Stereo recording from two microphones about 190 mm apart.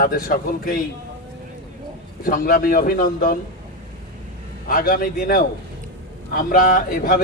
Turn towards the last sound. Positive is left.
turn(degrees=50)  # may be behind; listen again after turning